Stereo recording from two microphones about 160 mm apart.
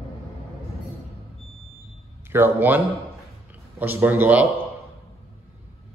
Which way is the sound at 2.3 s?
10° right (ahead or behind).